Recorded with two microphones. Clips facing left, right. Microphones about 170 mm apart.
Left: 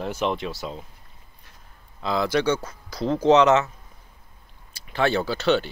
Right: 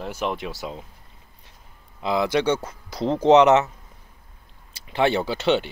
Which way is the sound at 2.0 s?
20° right (ahead or behind).